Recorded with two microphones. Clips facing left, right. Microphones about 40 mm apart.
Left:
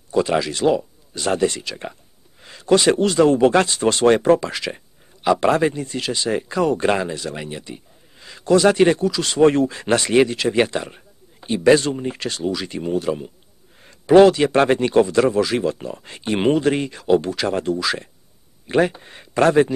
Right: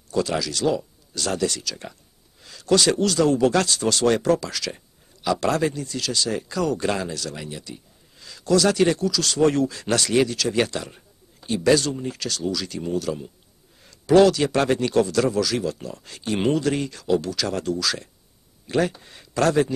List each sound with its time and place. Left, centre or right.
0.1 s speech: left